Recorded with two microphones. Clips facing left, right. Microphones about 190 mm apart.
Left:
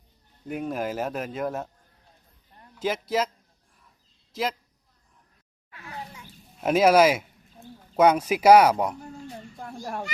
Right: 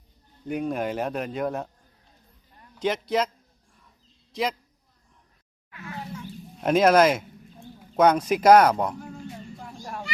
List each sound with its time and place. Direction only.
0.4 s speech: centre (ahead or behind)
2.8 s speech: 5° left (ahead or behind)
4.3 s a man's voice: centre (ahead or behind)
6.1 s chicken: 5° left (ahead or behind)
7.9 s speech: 10° left (ahead or behind)
9.6 s children playing: 50° left (ahead or behind)